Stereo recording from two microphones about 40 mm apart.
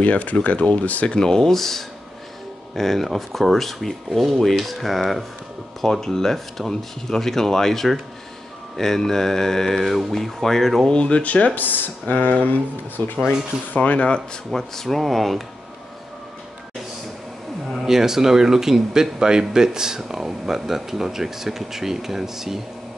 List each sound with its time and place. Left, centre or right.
0.0 s speech: left
1.1 s speech: centre
5.8 s speech: centre
10.9 s speech: left
11.5 s speech: left
13.7 s speech: left
14.5 s speech: centre
17.6 s speech: centre